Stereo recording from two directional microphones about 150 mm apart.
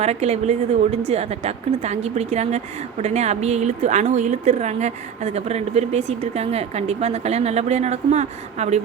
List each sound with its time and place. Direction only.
0.0 s a woman's voice: 45° right (ahead or behind)